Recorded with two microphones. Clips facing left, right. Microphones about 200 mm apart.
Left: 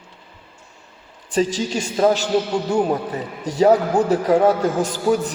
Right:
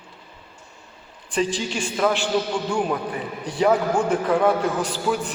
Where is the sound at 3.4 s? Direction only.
40° left (ahead or behind).